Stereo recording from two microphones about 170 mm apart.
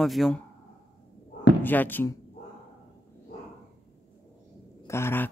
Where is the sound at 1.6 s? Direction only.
10° left (ahead or behind).